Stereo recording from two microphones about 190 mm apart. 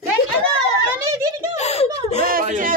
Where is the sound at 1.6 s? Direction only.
35° left (ahead or behind).